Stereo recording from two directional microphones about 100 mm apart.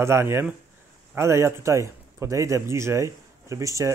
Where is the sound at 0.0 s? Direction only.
25° right (ahead or behind).